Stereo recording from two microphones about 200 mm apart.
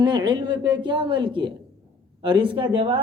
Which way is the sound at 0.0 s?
25° right (ahead or behind).